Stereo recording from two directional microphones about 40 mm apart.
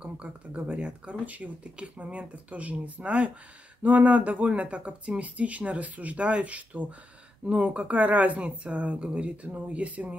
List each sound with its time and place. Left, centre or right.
0.0 s speech: right
1.2 s speech: right
3.8 s speech: right